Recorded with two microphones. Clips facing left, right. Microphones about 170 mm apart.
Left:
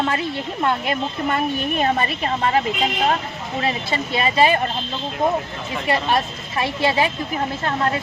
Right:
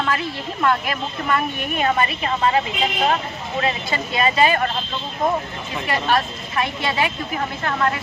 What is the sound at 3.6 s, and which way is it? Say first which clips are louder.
Speech: even; 30° left (ahead or behind).